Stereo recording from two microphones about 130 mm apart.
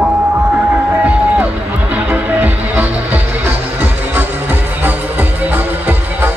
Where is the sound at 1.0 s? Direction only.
10° right (ahead or behind).